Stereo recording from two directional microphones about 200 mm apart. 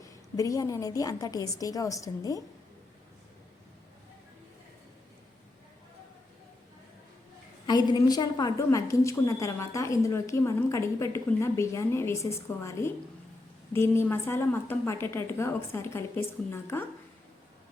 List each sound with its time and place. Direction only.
0.3 s a woman's voice: 15° left (ahead or behind)
7.7 s a woman's voice: 20° left (ahead or behind)